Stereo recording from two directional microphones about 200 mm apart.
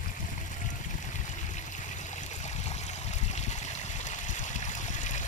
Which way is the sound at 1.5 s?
35° left (ahead or behind).